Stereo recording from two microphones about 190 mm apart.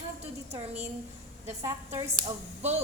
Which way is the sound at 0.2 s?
35° right (ahead or behind).